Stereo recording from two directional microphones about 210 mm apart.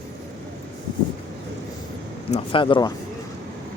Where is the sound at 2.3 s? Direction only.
25° left (ahead or behind).